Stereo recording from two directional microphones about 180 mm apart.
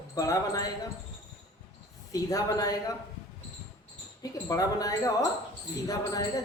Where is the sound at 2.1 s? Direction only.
20° left (ahead or behind).